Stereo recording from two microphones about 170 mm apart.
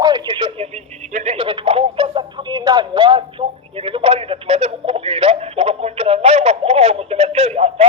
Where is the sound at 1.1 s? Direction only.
45° right (ahead or behind).